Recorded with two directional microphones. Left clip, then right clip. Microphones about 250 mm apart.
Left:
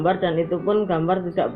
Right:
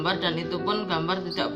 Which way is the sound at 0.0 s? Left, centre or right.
Centre.